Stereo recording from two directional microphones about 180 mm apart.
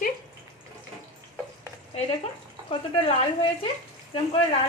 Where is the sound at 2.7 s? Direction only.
30° left (ahead or behind).